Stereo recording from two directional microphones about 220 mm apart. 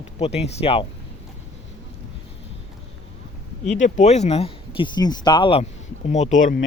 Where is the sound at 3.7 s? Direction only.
35° left (ahead or behind).